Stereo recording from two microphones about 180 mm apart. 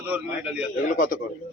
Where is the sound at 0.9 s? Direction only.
50° left (ahead or behind).